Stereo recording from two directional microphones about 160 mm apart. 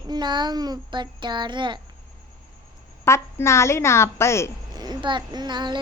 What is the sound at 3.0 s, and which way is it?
A woman's voice, 15° left (ahead or behind).